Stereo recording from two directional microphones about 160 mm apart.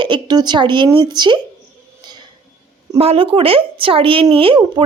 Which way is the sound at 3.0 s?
35° right (ahead or behind).